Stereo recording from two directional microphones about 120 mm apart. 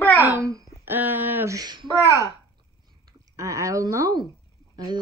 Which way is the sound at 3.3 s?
25° right (ahead or behind).